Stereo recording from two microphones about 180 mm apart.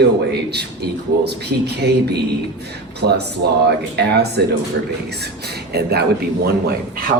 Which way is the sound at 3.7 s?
65° right (ahead or behind).